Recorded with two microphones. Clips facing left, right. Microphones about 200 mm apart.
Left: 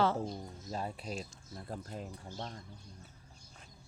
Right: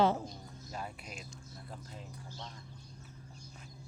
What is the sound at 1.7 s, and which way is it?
Speech, 50° left (ahead or behind).